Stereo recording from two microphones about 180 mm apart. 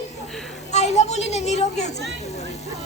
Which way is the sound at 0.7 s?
40° left (ahead or behind).